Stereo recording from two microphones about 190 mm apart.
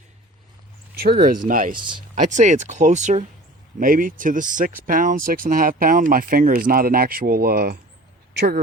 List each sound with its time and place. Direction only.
0.9 s speech: 55° right (ahead or behind)
1.8 s speech: 25° right (ahead or behind)
2.1 s speech: 40° right (ahead or behind)
8.3 s a sound: 60° right (ahead or behind)